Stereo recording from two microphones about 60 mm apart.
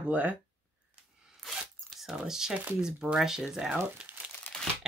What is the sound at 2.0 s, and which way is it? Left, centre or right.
Speech, centre.